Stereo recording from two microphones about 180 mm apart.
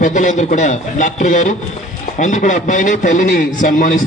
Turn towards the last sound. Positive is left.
turn(degrees=45)  # may be behind; listen again after turning